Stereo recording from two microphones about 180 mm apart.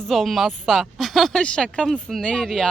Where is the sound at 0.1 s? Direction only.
Centre (ahead or behind).